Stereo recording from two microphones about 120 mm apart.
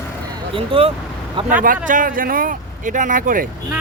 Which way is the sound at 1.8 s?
90° right.